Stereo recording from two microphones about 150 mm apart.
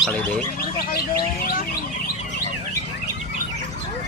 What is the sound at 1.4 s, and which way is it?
Bird, 70° left (ahead or behind).